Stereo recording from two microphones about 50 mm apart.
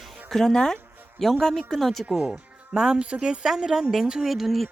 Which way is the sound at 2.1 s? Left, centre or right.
Centre.